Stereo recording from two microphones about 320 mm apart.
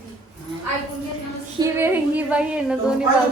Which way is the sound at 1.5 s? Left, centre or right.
Centre.